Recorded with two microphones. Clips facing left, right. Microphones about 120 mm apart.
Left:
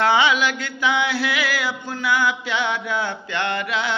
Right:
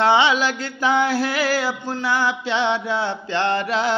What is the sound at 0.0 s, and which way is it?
Music, 30° right (ahead or behind).